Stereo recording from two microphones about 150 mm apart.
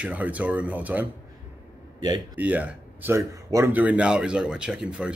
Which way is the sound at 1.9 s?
30° right (ahead or behind).